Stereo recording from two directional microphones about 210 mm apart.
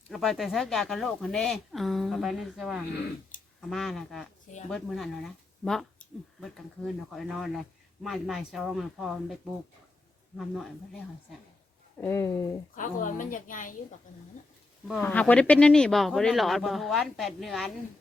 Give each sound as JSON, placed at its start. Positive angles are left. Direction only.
{"t": 0.1, "sound": "speech", "side_deg": 0}
{"t": 11.9, "sound": "speech", "side_deg": 10}
{"t": 12.7, "sound": "a woman's voice", "side_deg": 40}
{"t": 15.0, "sound": "speech", "side_deg": 5}